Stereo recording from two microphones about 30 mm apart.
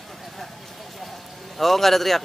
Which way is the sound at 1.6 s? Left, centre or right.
Centre.